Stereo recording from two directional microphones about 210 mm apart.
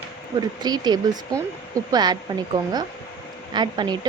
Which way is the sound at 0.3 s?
20° right (ahead or behind).